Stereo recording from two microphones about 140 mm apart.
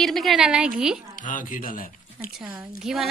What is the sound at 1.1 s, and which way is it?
Speech, 70° left (ahead or behind).